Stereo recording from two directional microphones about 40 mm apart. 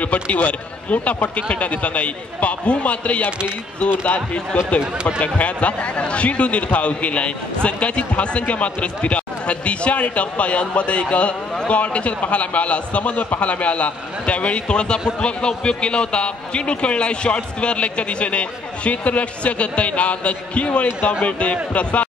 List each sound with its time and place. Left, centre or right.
0.0 s speech: left
5.2 s speech: left